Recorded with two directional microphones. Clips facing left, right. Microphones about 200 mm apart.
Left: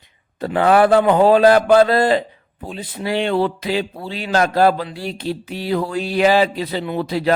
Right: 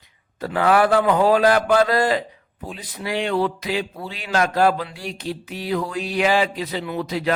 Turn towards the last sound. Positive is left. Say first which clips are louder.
# left 4 dB
turn(degrees=30)  # may be behind; listen again after turning